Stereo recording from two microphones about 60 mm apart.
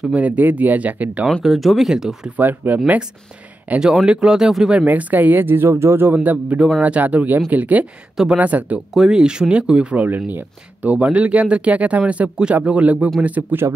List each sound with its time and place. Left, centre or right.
0.1 s speech: right
1.4 s speech: centre
2.3 s speech: right
3.8 s speech: centre
4.7 s speech: right
5.7 s speech: right
6.1 s speech: right
8.9 s speech: centre
10.0 s speech: right